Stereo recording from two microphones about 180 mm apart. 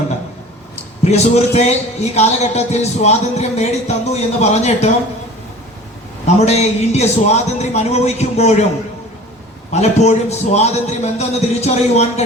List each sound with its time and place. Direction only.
1.0 s a man's voice: 40° left (ahead or behind)
6.2 s a man's voice: 35° left (ahead or behind)
9.7 s a man's voice: 40° left (ahead or behind)